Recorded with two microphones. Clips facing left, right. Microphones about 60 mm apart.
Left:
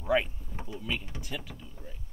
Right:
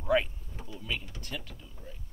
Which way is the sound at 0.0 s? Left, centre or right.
Centre.